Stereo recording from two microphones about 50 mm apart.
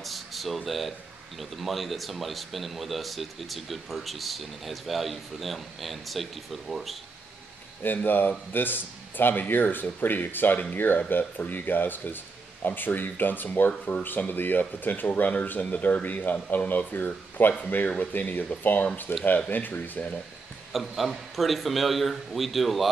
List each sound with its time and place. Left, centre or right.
0.0 s a sound: centre
0.7 s speech: centre
7.8 s speech: left
19.1 s speech: left
19.5 s speech: left
20.7 s speech: centre